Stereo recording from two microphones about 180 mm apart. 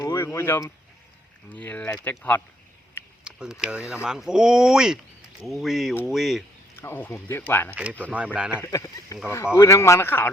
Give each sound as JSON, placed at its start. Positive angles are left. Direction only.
{"t": 0.0, "sound": "a sound", "side_deg": 15}
{"t": 0.3, "sound": "speech", "side_deg": 15}
{"t": 3.2, "sound": "speech", "side_deg": -5}
{"t": 6.7, "sound": "speech", "side_deg": 15}
{"t": 7.7, "sound": "speech", "side_deg": -5}
{"t": 8.6, "sound": "speech", "side_deg": 20}